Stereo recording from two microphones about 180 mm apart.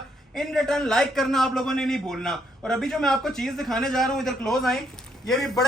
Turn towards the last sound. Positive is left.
turn(degrees=0)  # may be behind; listen again after turning